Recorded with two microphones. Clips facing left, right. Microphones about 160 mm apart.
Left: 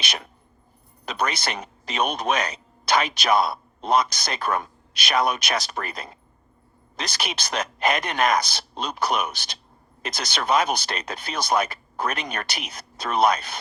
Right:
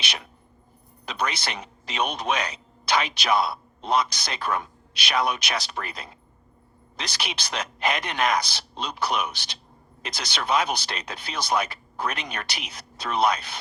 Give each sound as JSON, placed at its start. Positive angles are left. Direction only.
{"t": 1.0, "sound": "speech", "side_deg": 45}